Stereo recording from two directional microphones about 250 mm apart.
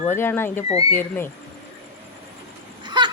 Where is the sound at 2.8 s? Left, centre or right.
Centre.